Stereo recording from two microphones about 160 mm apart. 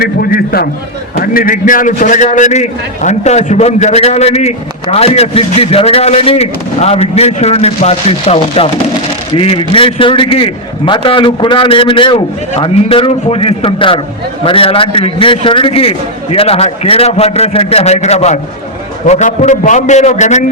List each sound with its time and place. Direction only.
0.0 s a man's voice: 70° left (ahead or behind); by 20.4 s 45° left (ahead or behind)